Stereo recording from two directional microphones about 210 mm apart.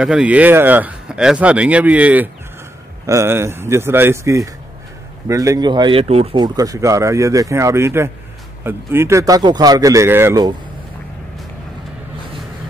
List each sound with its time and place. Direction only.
0.0 s speech: 5° right (ahead or behind)